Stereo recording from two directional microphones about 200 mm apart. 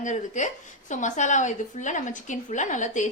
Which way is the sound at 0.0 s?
40° left (ahead or behind).